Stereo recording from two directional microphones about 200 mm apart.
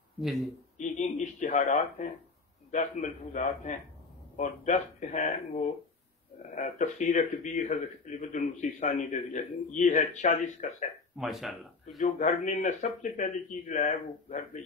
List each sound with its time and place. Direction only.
0.2 s speech: centre (ahead or behind)
0.7 s speech: 35° left (ahead or behind)
6.5 s speech: 40° left (ahead or behind)
11.1 s speech: centre (ahead or behind)
12.0 s speech: 35° left (ahead or behind)